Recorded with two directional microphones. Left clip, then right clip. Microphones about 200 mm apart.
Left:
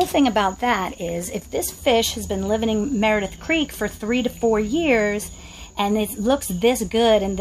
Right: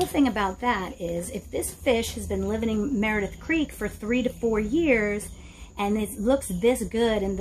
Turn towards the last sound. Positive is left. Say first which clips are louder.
# left 7 dB
turn(degrees=40)  # may be behind; listen again after turning